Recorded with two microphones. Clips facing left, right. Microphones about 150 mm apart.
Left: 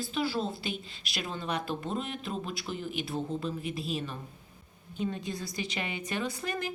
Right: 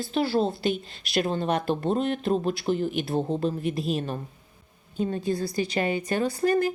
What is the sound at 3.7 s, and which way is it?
A woman's voice, 50° right (ahead or behind).